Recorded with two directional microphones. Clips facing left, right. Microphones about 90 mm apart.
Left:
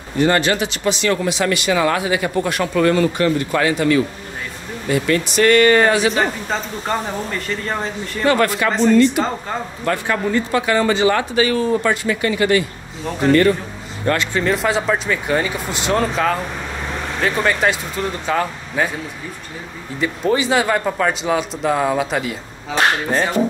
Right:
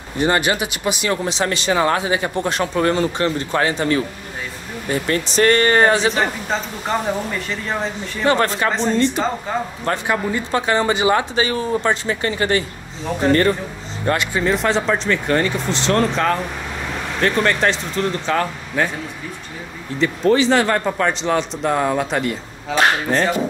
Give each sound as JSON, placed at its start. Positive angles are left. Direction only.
{"t": 0.2, "sound": "speech", "side_deg": -20}
{"t": 1.1, "sound": "speech", "side_deg": -30}
{"t": 6.1, "sound": "speech", "side_deg": 0}
{"t": 8.3, "sound": "speech", "side_deg": -30}
{"t": 10.0, "sound": "speech", "side_deg": -15}
{"t": 10.5, "sound": "speech", "side_deg": -25}
{"t": 14.0, "sound": "speech", "side_deg": -15}
{"t": 14.4, "sound": "speech", "side_deg": 0}
{"t": 20.0, "sound": "speech", "side_deg": 10}